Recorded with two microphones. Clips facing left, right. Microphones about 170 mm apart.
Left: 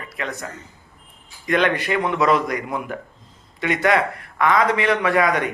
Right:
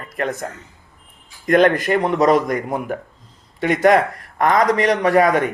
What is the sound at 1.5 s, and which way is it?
A man's voice, 45° right (ahead or behind).